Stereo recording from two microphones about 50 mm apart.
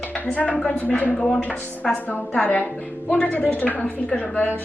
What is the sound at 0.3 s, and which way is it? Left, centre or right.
A woman's voice, left.